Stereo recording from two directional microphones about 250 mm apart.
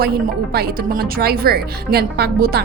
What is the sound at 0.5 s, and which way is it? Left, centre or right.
A woman's voice, right.